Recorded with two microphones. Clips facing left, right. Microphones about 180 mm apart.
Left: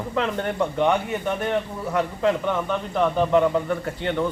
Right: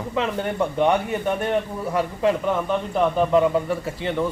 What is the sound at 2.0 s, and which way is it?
A man's voice, 10° right (ahead or behind).